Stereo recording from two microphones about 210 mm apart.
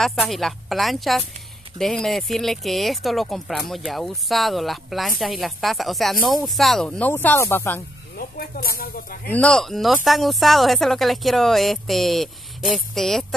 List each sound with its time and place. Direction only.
0.0 s speech: centre (ahead or behind)
8.2 s speech: 45° left (ahead or behind)
9.3 s speech: 5° left (ahead or behind)